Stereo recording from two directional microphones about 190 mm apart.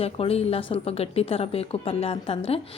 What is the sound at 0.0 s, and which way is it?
A woman's voice, 30° left (ahead or behind).